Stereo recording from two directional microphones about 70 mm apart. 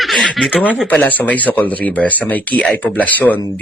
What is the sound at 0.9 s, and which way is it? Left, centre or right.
Speech, left.